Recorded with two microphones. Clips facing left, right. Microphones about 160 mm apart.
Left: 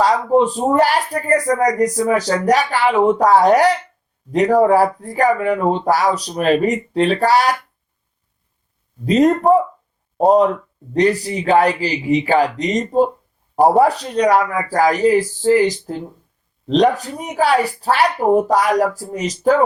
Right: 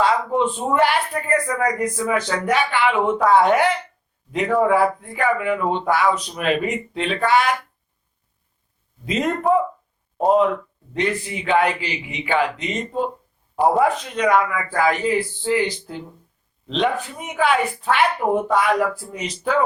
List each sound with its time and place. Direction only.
0.0 s speech: 40° left (ahead or behind)
9.0 s speech: 40° left (ahead or behind)